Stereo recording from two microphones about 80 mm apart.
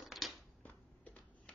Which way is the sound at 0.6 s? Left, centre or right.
Centre.